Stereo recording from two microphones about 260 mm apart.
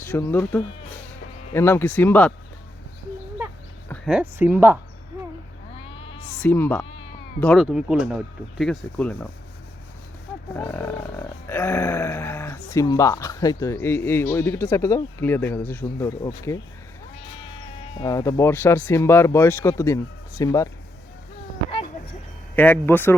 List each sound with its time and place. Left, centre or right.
0.0 s speech: centre
1.5 s grunt: centre
3.8 s speech: centre
5.1 s a sound: centre
5.7 s cat: left
6.4 s grunt: centre
7.3 s speech: centre
10.5 s grunt: centre
17.9 s grunt: centre
22.5 s grunt: centre